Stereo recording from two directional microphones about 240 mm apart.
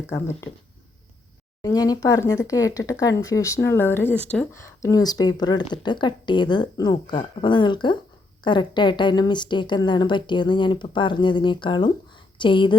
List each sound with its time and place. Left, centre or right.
1.6 s a woman's voice: centre